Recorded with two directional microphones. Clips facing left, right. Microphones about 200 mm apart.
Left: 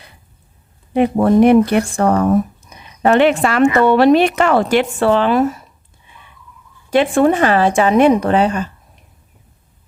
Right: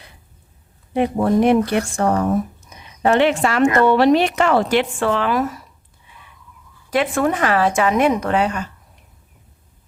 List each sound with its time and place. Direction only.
0.9 s speech: 65° left (ahead or behind); by 5.6 s 25° left (ahead or behind)
6.9 s speech: 30° left (ahead or behind)